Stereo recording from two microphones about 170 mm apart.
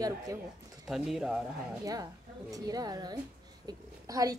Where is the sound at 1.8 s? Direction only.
20° right (ahead or behind).